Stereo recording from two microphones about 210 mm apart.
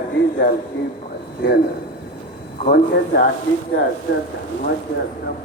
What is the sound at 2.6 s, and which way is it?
Speech, 45° left (ahead or behind).